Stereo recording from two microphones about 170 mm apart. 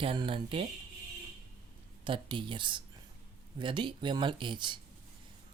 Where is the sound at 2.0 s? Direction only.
30° right (ahead or behind).